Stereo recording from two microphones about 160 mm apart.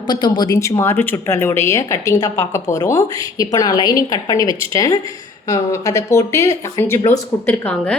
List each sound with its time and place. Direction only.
0.1 s a woman's voice: 25° left (ahead or behind); by 7.9 s 10° left (ahead or behind)